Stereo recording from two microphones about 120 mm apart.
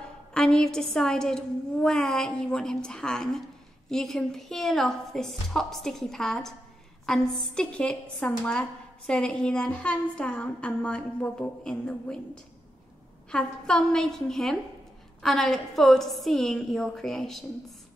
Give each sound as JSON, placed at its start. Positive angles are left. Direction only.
{"t": 0.3, "sound": "a woman's voice", "side_deg": 5}
{"t": 13.3, "sound": "a woman's voice", "side_deg": 5}